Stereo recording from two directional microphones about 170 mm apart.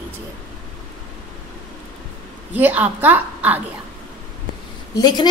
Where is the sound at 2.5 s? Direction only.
10° right (ahead or behind).